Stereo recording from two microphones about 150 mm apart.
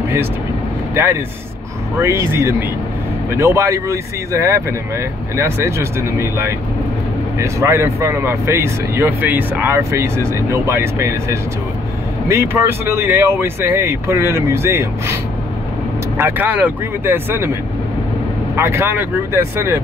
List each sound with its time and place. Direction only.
2.0 s speech: 15° right (ahead or behind)
16.2 s speech: 15° right (ahead or behind)
18.6 s speech: 15° right (ahead or behind)